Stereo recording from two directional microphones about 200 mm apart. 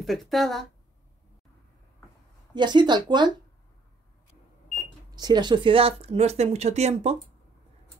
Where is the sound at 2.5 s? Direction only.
20° right (ahead or behind).